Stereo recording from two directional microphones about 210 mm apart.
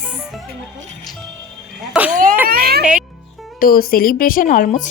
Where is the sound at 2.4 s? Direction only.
45° right (ahead or behind).